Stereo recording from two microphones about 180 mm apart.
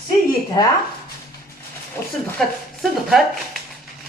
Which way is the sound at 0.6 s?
20° left (ahead or behind).